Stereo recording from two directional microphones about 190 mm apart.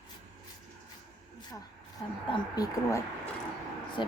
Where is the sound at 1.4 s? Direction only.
20° left (ahead or behind).